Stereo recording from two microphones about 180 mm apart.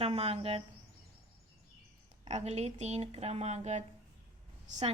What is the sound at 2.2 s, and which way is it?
A woman's voice, 40° right (ahead or behind).